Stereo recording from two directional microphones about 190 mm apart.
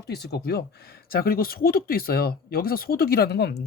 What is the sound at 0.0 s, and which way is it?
Speech, 60° left (ahead or behind).